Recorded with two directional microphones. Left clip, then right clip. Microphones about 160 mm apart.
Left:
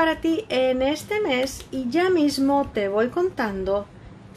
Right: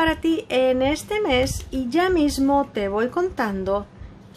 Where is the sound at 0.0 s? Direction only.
15° right (ahead or behind).